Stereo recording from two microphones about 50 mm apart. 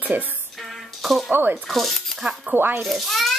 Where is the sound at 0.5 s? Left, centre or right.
Centre.